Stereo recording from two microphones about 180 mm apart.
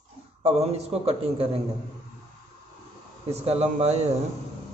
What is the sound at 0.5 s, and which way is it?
A man's voice, 35° right (ahead or behind).